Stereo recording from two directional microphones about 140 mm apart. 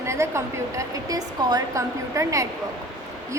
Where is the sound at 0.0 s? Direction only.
20° right (ahead or behind).